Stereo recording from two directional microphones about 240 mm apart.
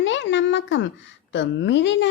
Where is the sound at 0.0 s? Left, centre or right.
Left.